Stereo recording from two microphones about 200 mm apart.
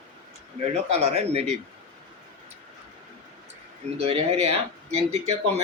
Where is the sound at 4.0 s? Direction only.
30° right (ahead or behind).